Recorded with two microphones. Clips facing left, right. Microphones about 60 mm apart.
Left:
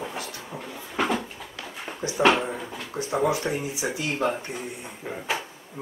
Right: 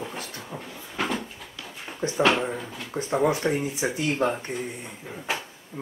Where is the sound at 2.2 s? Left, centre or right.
Centre.